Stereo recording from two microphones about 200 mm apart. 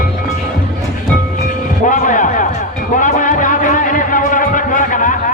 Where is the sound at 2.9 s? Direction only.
40° left (ahead or behind).